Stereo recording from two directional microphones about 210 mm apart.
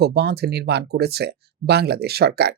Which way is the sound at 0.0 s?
50° right (ahead or behind).